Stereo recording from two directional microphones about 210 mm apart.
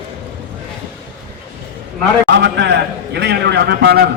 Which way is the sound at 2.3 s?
55° right (ahead or behind).